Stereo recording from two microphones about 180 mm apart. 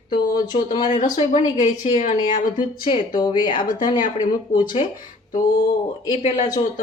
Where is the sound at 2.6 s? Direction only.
25° left (ahead or behind).